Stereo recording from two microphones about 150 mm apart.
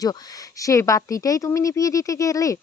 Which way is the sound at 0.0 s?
25° left (ahead or behind).